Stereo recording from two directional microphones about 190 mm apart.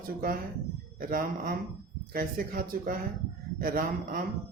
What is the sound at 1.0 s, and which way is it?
Speech, 50° right (ahead or behind).